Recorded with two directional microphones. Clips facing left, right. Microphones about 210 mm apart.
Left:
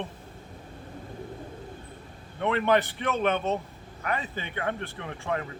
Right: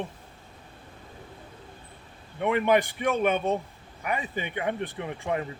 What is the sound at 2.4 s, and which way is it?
Speech, 10° right (ahead or behind).